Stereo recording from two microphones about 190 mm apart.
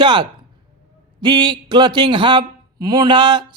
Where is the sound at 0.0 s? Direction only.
25° right (ahead or behind).